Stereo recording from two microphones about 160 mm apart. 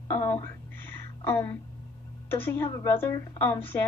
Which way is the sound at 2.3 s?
15° left (ahead or behind).